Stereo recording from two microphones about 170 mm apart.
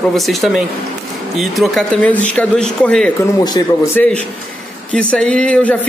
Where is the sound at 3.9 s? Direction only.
10° left (ahead or behind).